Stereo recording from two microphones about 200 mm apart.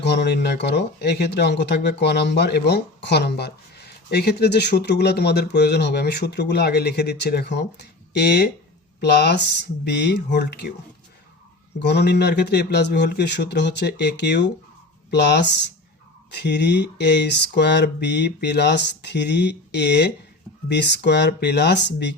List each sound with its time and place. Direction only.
0.0 s speech: 60° left (ahead or behind)
11.8 s speech: 55° left (ahead or behind)